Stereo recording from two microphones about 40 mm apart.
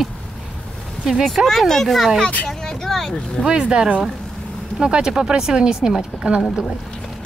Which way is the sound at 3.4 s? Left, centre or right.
Right.